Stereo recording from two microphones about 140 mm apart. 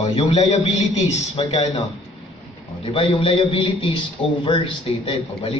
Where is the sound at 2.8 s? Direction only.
40° left (ahead or behind).